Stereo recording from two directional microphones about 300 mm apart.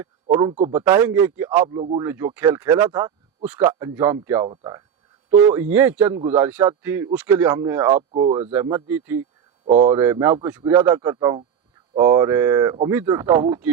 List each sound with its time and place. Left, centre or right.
0.0 s a sound: centre
0.5 s a man's voice: centre
8.6 s a man's voice: centre